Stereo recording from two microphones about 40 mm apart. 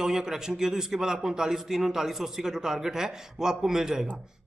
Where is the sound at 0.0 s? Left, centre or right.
Centre.